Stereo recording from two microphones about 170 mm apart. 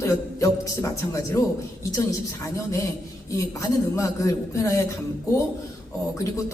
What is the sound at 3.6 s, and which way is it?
A man's voice, 20° left (ahead or behind).